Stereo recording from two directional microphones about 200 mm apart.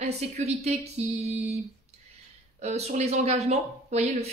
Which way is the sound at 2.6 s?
35° right (ahead or behind).